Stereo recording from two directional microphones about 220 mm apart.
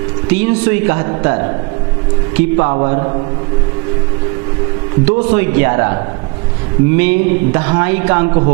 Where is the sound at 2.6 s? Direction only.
25° right (ahead or behind).